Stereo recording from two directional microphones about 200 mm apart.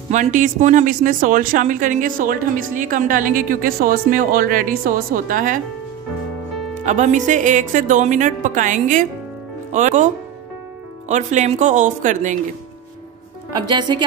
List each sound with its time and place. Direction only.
0.1 s speech: 40° right (ahead or behind)
6.8 s speech: 35° right (ahead or behind)
11.1 s speech: 35° right (ahead or behind)
13.5 s a woman's voice: 20° right (ahead or behind)